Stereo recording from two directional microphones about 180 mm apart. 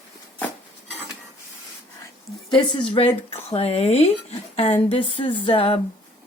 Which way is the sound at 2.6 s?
30° left (ahead or behind).